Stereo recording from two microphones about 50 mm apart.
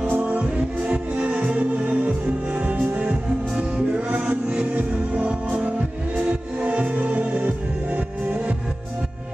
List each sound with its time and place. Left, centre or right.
0.0 s music: right